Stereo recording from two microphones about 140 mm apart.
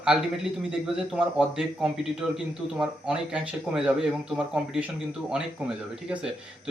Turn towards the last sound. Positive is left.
turn(degrees=-5)  # may be behind; listen again after turning